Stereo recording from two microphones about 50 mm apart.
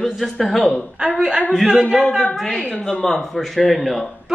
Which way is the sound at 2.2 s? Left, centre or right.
Centre.